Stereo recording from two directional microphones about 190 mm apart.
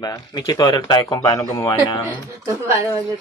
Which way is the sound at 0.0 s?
20° left (ahead or behind).